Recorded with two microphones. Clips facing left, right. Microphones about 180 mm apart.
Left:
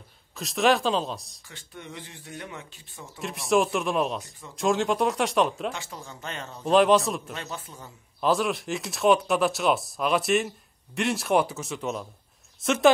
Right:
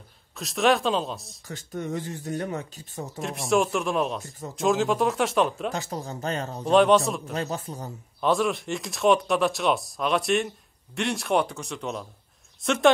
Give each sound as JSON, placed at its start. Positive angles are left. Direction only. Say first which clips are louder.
{"t": 0.4, "sound": "speech", "louder": "even", "side_deg": 0}
{"t": 1.5, "sound": "speech", "louder": "right 11 dB", "side_deg": -40}
{"t": 3.2, "sound": "speech", "louder": "even", "side_deg": 0}
{"t": 5.7, "sound": "speech", "louder": "right 5 dB", "side_deg": -40}
{"t": 6.7, "sound": "speech", "louder": "right 1 dB", "side_deg": 0}
{"t": 7.3, "sound": "speech", "louder": "right 7 dB", "side_deg": -40}
{"t": 8.2, "sound": "speech", "louder": "right 1 dB", "side_deg": 0}